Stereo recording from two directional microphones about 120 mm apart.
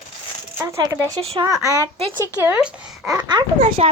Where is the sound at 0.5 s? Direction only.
25° right (ahead or behind).